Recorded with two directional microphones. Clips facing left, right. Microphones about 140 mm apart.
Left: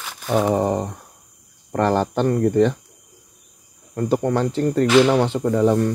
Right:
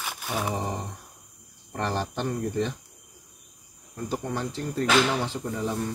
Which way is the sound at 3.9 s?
70° left (ahead or behind).